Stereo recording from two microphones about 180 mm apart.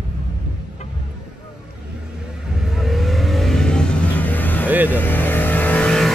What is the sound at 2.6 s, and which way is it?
Vehicle, centre (ahead or behind).